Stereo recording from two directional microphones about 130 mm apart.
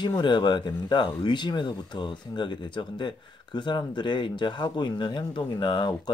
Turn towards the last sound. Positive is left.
turn(degrees=35)  # may be behind; listen again after turning